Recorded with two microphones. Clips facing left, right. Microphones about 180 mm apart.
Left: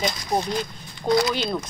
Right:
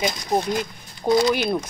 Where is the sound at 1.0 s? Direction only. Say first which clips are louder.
Right 2 dB; 20° right (ahead or behind).